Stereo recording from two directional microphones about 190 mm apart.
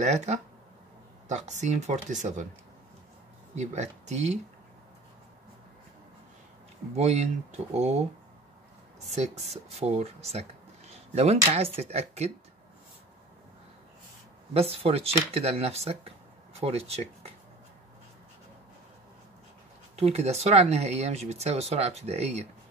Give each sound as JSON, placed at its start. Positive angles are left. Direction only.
{"t": 0.0, "sound": "speech", "side_deg": -35}
{"t": 3.5, "sound": "speech", "side_deg": -35}
{"t": 7.0, "sound": "speech", "side_deg": -35}
{"t": 9.0, "sound": "speech", "side_deg": -35}
{"t": 14.5, "sound": "speech", "side_deg": -30}
{"t": 20.0, "sound": "speech", "side_deg": -35}